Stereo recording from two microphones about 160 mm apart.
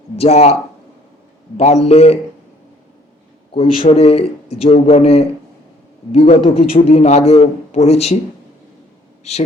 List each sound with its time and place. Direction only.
0.2 s a man's voice: 40° left (ahead or behind)
1.5 s a man's voice: 40° left (ahead or behind)
3.5 s a man's voice: 35° left (ahead or behind)
9.3 s speech: 40° left (ahead or behind)